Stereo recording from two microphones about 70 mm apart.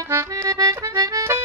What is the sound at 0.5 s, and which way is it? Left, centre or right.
Accordion, right.